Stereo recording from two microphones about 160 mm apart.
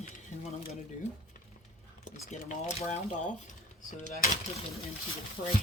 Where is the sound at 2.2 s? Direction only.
50° left (ahead or behind).